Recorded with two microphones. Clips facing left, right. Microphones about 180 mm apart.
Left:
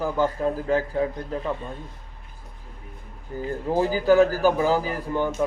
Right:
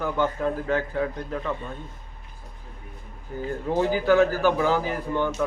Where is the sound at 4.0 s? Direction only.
35° left (ahead or behind).